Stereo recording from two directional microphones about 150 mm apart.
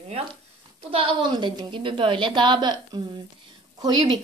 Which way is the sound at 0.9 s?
35° right (ahead or behind).